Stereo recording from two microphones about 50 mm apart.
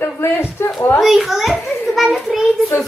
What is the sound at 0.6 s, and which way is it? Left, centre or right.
Speech, left.